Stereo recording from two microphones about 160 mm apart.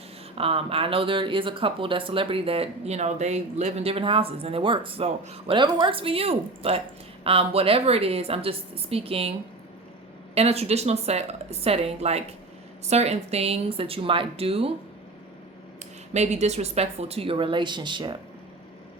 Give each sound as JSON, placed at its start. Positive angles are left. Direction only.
{"t": 0.3, "sound": "speech", "side_deg": -35}
{"t": 10.3, "sound": "speech", "side_deg": -40}
{"t": 16.1, "sound": "speech", "side_deg": -45}